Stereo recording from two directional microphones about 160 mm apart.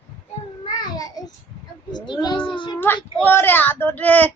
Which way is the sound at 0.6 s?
25° left (ahead or behind).